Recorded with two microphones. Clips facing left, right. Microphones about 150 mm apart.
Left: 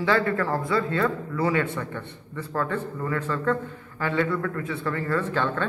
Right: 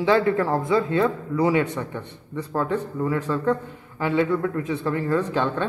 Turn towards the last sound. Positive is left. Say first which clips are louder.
# right 2 dB
turn(degrees=-15)  # may be behind; listen again after turning